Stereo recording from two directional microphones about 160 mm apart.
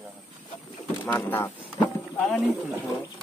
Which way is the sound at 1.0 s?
10° left (ahead or behind).